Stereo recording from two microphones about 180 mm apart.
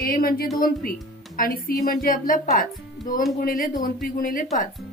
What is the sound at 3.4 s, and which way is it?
Speech, 50° left (ahead or behind).